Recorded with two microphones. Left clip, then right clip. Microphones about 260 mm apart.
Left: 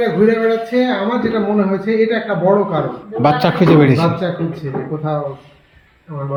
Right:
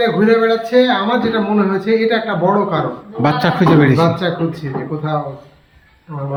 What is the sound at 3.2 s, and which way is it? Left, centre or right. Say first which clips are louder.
A man's voice: left 1 dB; centre.